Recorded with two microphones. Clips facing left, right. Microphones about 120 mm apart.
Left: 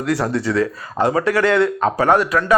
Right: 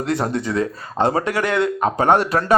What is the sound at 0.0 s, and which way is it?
Speech, 20° right (ahead or behind).